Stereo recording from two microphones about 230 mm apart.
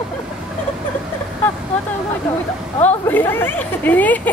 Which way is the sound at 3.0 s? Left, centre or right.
Centre.